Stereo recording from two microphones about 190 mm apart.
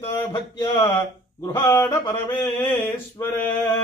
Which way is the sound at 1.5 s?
20° left (ahead or behind).